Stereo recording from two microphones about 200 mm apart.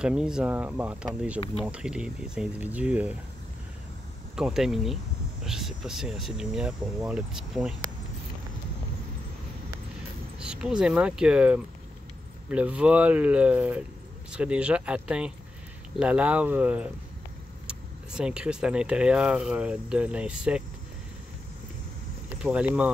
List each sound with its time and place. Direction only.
0.0 s speech: 5° right (ahead or behind)
1.4 s speech: 30° left (ahead or behind)
1.7 s speech: 5° right (ahead or behind)
4.4 s speech: 5° right (ahead or behind)
10.4 s speech: 5° right (ahead or behind)
22.4 s speech: 5° right (ahead or behind)